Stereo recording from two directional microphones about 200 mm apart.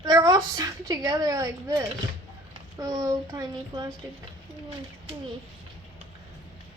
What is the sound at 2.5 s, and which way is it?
Speech, 15° right (ahead or behind).